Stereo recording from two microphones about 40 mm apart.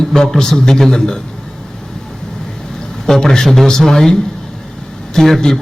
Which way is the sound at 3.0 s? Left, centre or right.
Centre.